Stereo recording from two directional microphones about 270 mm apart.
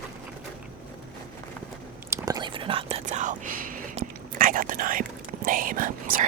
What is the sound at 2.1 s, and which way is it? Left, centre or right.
Whispering, centre.